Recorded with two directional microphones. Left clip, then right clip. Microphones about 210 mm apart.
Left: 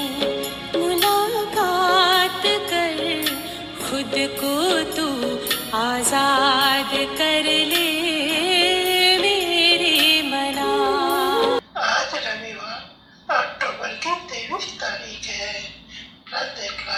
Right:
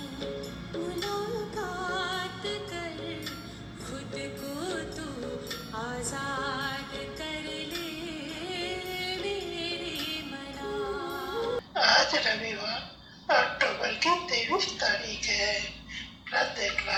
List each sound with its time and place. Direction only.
0.7 s music: 45° left (ahead or behind)
11.8 s cough: 15° right (ahead or behind)
13.2 s music: 15° right (ahead or behind)